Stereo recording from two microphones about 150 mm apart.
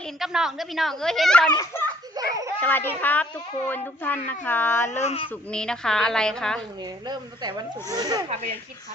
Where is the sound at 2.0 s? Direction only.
25° right (ahead or behind).